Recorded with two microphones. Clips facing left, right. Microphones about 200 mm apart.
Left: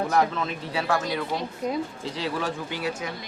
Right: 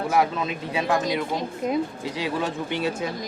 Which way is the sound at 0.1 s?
10° right (ahead or behind).